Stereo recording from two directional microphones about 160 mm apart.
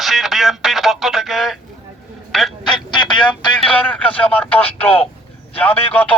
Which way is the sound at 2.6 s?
30° left (ahead or behind).